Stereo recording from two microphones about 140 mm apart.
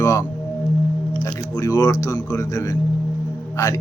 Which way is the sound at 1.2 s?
25° left (ahead or behind).